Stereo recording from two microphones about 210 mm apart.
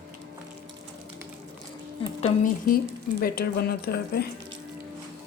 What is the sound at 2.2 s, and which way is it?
Speech, 40° left (ahead or behind).